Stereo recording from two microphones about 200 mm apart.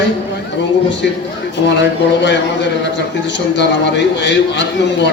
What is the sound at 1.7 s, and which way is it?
A man's voice, 65° left (ahead or behind).